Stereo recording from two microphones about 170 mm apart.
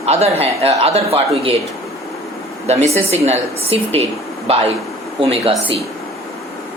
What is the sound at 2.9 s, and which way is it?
Speech, 40° right (ahead or behind).